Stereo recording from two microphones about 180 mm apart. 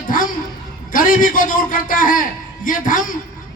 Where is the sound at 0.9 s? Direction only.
50° left (ahead or behind).